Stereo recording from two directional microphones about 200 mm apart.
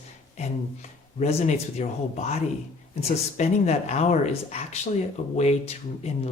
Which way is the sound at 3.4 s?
35° left (ahead or behind).